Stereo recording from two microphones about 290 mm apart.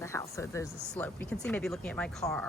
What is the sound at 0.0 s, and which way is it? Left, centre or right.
Speech, centre.